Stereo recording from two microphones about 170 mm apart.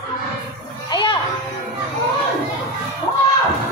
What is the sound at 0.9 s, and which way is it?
Children playing, 30° left (ahead or behind).